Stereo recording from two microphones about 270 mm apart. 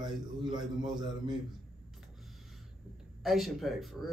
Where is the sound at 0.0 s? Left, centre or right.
Centre.